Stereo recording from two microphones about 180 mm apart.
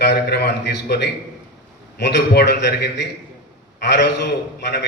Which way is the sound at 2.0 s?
70° left (ahead or behind).